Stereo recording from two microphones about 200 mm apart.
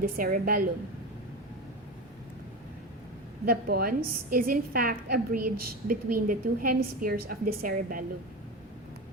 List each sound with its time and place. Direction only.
0.0 s a woman's voice: 45° right (ahead or behind)
3.4 s a woman's voice: 50° right (ahead or behind)